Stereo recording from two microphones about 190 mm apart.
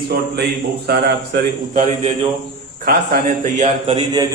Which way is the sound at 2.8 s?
50° right (ahead or behind).